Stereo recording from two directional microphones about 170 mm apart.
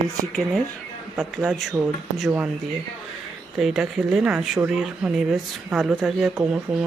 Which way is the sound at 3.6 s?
Centre (ahead or behind).